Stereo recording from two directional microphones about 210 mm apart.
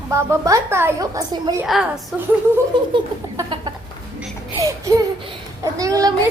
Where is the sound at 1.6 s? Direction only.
Centre (ahead or behind).